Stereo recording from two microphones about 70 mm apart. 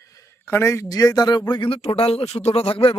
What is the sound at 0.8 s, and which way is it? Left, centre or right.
Speech, left.